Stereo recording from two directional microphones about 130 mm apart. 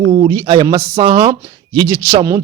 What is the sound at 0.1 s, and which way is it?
Speech, 30° right (ahead or behind).